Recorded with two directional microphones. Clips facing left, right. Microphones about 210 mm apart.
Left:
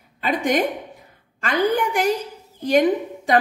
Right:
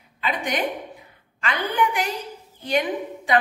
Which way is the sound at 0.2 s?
45° left (ahead or behind).